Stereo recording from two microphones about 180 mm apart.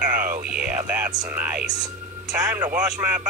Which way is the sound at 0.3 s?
50° right (ahead or behind).